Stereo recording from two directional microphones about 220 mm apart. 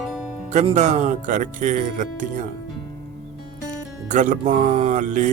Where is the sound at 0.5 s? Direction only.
30° right (ahead or behind).